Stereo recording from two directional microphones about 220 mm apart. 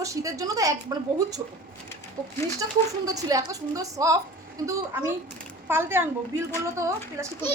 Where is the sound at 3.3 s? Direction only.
15° right (ahead or behind).